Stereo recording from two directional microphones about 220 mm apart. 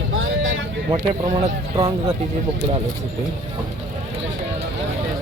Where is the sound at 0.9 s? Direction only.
35° right (ahead or behind).